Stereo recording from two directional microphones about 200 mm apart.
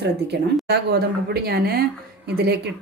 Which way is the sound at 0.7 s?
55° right (ahead or behind).